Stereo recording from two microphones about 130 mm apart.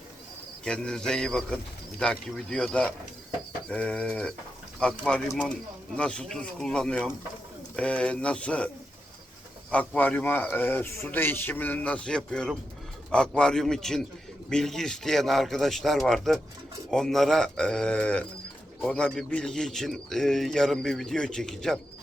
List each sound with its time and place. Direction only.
0.6 s a man's voice: 5° left (ahead or behind)
9.7 s a man's voice: 10° left (ahead or behind)